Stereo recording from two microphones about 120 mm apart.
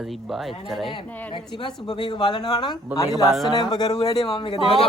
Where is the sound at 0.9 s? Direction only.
45° left (ahead or behind).